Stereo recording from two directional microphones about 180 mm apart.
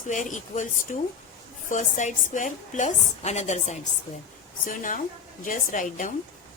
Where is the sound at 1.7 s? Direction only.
45° left (ahead or behind).